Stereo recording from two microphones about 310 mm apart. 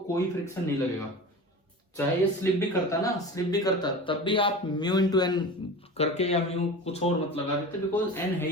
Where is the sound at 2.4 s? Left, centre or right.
Centre.